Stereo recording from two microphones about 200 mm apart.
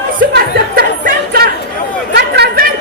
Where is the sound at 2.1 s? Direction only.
50° right (ahead or behind).